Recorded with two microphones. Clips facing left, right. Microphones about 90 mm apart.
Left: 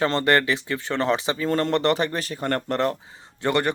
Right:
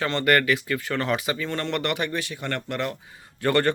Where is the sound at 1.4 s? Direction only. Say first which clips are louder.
Left 10 dB; 40° left (ahead or behind).